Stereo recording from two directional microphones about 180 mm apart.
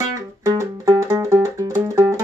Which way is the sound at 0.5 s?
15° right (ahead or behind).